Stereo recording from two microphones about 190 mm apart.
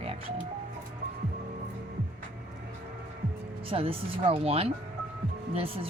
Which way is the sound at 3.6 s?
30° right (ahead or behind).